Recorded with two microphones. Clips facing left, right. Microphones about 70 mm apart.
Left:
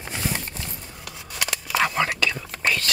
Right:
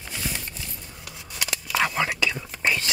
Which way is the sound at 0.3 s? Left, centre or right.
Left.